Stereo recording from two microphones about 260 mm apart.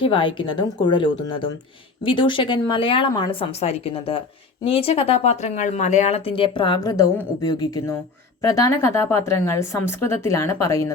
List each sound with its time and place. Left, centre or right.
0.0 s speech: centre